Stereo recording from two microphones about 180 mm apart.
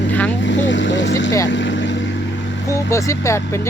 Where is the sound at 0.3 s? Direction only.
90° left.